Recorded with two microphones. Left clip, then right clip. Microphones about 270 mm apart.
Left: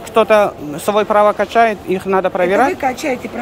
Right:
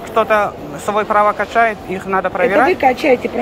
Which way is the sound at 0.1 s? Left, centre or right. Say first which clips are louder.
Left 3 dB; left.